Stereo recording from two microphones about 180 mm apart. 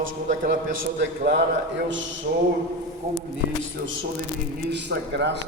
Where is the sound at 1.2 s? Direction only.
75° right (ahead or behind).